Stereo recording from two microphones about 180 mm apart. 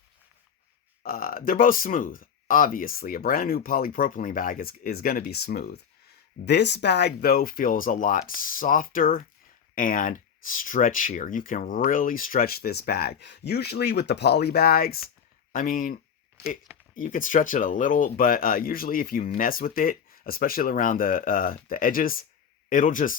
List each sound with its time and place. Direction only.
1.0 s speech: 55° left (ahead or behind)
6.4 s speech: 70° left (ahead or behind); by 23.1 s 45° left (ahead or behind)